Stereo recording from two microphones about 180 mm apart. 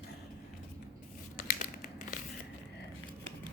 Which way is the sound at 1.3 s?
50° left (ahead or behind).